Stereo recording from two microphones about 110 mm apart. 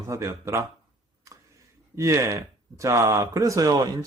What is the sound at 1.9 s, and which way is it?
Speech, 25° right (ahead or behind).